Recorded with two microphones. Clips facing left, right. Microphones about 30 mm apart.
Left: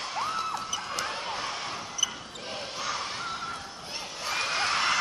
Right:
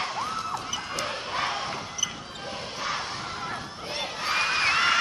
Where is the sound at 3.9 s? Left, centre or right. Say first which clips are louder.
Right 5 dB; right.